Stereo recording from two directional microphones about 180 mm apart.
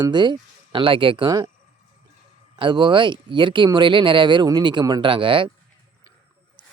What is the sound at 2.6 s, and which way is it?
Speech, 25° right (ahead or behind).